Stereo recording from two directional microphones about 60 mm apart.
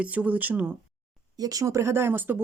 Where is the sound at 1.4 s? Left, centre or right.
Right.